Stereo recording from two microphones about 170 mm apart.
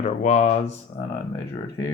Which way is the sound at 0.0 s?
45° left (ahead or behind).